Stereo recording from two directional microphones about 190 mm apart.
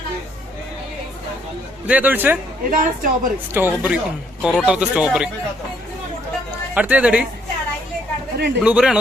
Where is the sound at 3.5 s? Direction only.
10° right (ahead or behind).